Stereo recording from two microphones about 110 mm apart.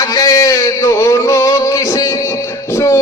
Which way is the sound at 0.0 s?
35° left (ahead or behind).